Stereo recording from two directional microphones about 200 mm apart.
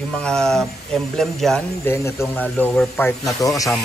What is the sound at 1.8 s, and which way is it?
A man's voice, 15° left (ahead or behind).